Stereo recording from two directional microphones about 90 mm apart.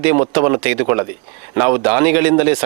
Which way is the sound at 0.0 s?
15° right (ahead or behind).